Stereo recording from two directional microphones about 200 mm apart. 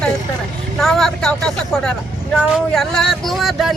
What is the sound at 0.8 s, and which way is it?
Speech, centre (ahead or behind).